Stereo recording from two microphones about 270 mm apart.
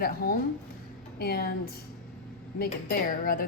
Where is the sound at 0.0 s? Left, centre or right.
Left.